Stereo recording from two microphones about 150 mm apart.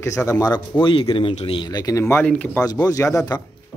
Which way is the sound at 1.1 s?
40° left (ahead or behind).